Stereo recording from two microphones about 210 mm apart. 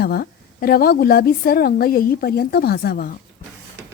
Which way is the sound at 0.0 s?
45° left (ahead or behind).